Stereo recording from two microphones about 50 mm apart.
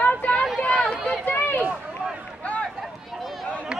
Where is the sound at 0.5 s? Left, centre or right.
Left.